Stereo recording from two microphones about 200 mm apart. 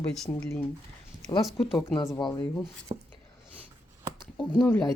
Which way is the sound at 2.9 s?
30° right (ahead or behind).